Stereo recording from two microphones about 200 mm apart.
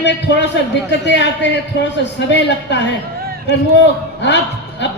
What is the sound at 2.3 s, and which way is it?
Speech, 60° left (ahead or behind).